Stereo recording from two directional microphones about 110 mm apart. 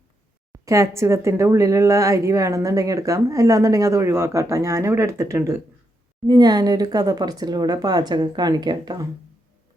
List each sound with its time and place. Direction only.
0.5 s speech: 30° right (ahead or behind)
6.2 s speech: 40° right (ahead or behind)